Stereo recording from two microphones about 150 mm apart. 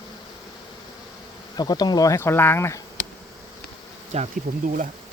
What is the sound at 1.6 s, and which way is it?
Speech, 25° left (ahead or behind).